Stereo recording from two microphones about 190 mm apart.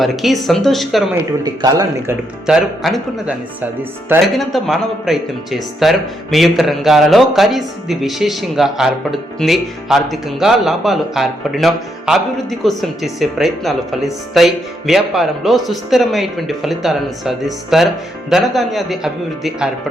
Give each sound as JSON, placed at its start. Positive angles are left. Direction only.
{"t": 0.0, "sound": "speech", "side_deg": 0}
{"t": 1.5, "sound": "speech", "side_deg": -20}
{"t": 2.5, "sound": "speech", "side_deg": 0}